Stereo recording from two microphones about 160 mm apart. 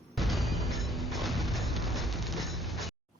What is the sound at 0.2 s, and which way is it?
Music, centre (ahead or behind).